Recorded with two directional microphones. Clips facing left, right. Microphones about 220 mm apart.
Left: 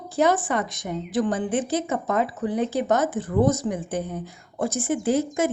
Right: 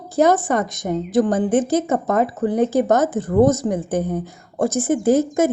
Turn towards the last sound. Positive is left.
turn(degrees=-45)  # may be behind; listen again after turning